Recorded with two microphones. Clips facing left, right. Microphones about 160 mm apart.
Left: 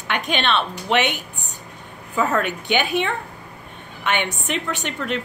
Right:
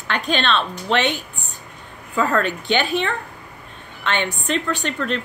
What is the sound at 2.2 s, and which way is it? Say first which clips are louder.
A woman's voice: right 1 dB; 10° left (ahead or behind).